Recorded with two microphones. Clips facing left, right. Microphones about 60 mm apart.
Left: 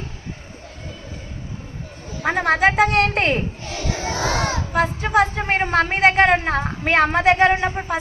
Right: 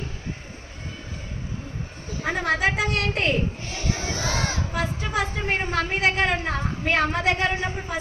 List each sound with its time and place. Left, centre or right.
2.2 s a woman's voice: left
3.8 s crowd: left
4.7 s a woman's voice: left